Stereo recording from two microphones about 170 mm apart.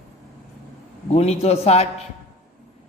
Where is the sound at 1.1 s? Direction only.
40° left (ahead or behind).